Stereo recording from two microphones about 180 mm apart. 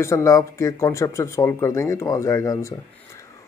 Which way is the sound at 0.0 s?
15° left (ahead or behind).